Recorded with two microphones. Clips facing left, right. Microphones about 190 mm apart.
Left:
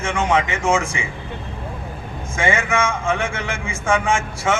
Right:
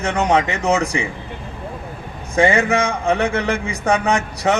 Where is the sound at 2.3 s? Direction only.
35° right (ahead or behind).